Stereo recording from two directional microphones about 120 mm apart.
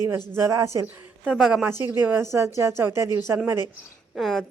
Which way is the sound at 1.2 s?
5° right (ahead or behind).